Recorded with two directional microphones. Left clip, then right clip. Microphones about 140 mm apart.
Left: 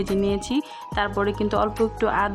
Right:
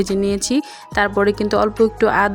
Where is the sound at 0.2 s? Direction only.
30° right (ahead or behind).